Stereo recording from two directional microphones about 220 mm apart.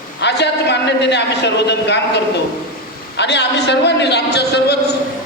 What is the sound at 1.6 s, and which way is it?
A man's voice, 50° left (ahead or behind).